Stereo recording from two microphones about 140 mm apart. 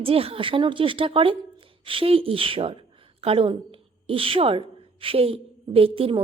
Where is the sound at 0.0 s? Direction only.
45° right (ahead or behind).